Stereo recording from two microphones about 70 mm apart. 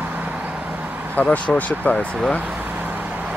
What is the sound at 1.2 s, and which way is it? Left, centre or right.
Speech, left.